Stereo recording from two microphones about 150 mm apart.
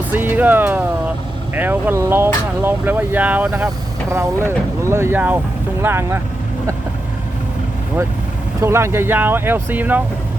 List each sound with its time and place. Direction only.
0.1 s speech: 10° right (ahead or behind)
8.6 s speech: 15° right (ahead or behind)